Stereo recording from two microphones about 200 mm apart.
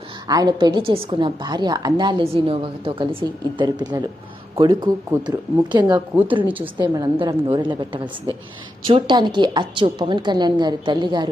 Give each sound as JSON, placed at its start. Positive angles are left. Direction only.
{"t": 0.3, "sound": "a woman's voice", "side_deg": -20}